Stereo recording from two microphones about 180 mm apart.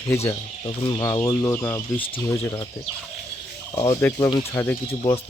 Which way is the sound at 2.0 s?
30° left (ahead or behind).